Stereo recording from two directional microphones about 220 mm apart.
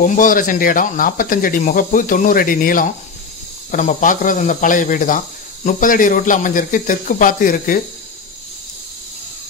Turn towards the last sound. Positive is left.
turn(degrees=40)  # may be behind; listen again after turning